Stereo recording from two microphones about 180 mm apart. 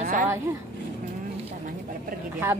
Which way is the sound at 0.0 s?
50° right (ahead or behind).